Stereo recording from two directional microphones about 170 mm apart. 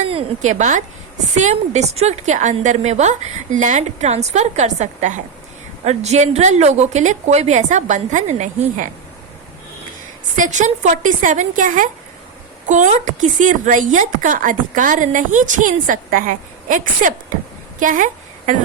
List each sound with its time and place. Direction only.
0.1 s a woman's voice: 40° right (ahead or behind)
10.3 s speech: 45° right (ahead or behind)
17.7 s a sound: 50° right (ahead or behind)